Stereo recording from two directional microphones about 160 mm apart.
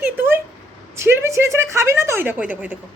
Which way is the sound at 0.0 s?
10° right (ahead or behind).